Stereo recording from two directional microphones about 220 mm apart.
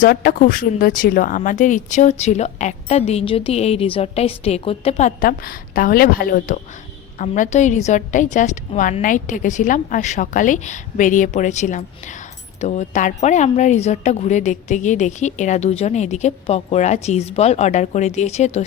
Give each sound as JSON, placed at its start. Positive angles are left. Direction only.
{"t": 0.0, "sound": "speech", "side_deg": 40}